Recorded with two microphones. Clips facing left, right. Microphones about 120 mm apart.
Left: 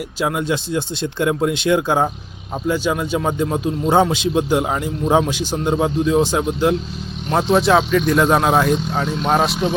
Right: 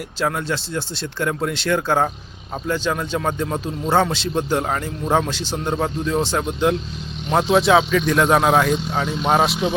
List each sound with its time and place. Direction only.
0.2 s speech: 10° left (ahead or behind)